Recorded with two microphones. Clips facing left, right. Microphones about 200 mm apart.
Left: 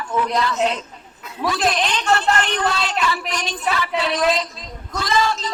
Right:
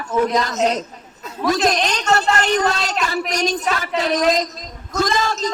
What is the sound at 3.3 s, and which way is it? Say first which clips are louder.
A woman's voice: right 4 dB; 40° right (ahead or behind).